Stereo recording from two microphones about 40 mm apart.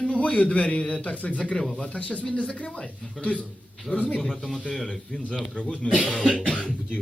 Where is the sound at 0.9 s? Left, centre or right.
Left.